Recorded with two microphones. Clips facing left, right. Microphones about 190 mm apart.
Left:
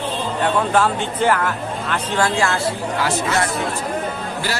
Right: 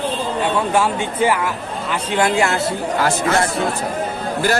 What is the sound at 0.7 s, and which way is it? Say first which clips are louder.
A man's voice: even; 10° right (ahead or behind).